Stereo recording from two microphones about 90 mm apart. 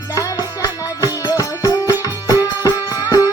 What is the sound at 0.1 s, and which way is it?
Music, 35° left (ahead or behind).